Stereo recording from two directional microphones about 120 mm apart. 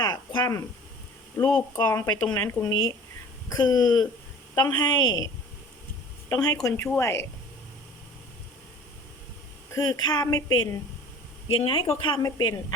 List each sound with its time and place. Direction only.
0.0 s a sound: 35° left (ahead or behind)
1.5 s speech: 10° left (ahead or behind)
1.8 s a woman's voice: 30° left (ahead or behind)
2.2 s speech: 20° left (ahead or behind)
3.5 s a woman's voice: 35° left (ahead or behind)
9.7 s a woman's voice: 30° left (ahead or behind)
11.4 s a woman's voice: 50° left (ahead or behind)